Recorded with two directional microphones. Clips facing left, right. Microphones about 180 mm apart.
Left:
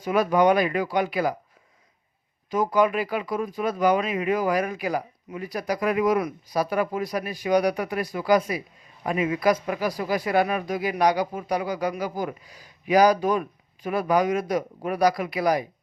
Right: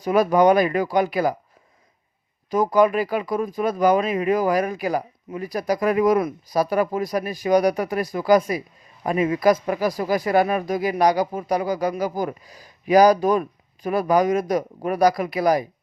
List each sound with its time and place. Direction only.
0.0 s speech: 40° right (ahead or behind)
2.5 s speech: 40° right (ahead or behind)